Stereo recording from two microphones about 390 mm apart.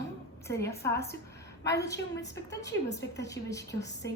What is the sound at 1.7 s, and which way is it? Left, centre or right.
Speech, left.